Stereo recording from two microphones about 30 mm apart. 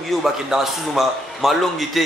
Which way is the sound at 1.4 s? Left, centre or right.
Centre.